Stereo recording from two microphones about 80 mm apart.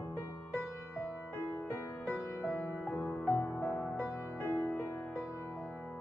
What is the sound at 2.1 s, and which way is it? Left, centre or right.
Music, left.